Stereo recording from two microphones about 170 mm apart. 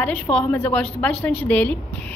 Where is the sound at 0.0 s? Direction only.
5° left (ahead or behind).